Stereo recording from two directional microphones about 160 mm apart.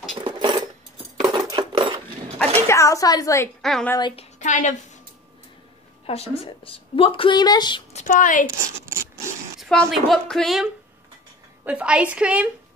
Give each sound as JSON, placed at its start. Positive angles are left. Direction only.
{"t": 0.1, "sound": "a sound", "side_deg": -30}
{"t": 2.3, "sound": "a sound", "side_deg": 15}
{"t": 3.6, "sound": "speech", "side_deg": 0}
{"t": 4.2, "sound": "a woman's voice", "side_deg": 50}
{"t": 6.0, "sound": "a woman's voice", "side_deg": 40}
{"t": 7.9, "sound": "a woman's voice", "side_deg": 50}
{"t": 8.5, "sound": "speech", "side_deg": -15}
{"t": 9.6, "sound": "a woman's voice", "side_deg": 0}